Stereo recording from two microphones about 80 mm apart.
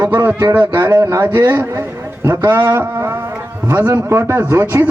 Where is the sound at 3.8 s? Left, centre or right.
Right.